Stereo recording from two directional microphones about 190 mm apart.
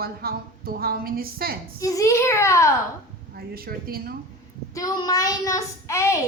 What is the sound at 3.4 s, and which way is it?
Speech, 50° right (ahead or behind).